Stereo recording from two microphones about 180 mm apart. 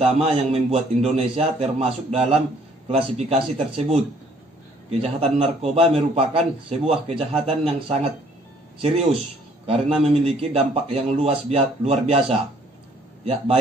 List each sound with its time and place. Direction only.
0.0 s a man's voice: 35° right (ahead or behind)
5.0 s a man's voice: 35° right (ahead or behind)